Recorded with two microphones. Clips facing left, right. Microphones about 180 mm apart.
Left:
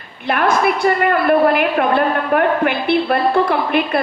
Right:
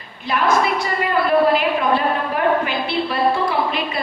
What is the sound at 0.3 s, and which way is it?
A woman's voice, 60° left (ahead or behind).